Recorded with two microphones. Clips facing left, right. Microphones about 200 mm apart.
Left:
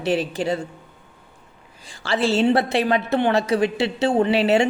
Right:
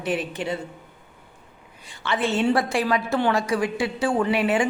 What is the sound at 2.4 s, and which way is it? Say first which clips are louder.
A woman's voice: left 2 dB; 25° left (ahead or behind).